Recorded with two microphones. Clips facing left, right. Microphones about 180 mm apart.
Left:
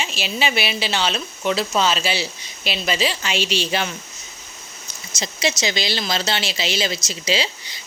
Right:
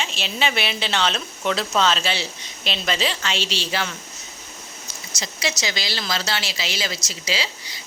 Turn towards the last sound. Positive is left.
turn(degrees=25)  # may be behind; listen again after turning